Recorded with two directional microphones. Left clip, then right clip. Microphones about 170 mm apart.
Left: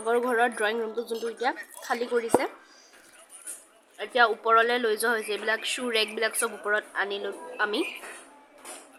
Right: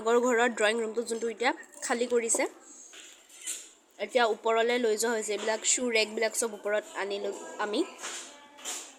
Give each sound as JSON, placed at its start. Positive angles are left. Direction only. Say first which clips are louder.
{"t": 0.0, "sound": "speech", "louder": "left 1 dB", "side_deg": -25}
{"t": 3.9, "sound": "speech", "louder": "left 4 dB", "side_deg": -30}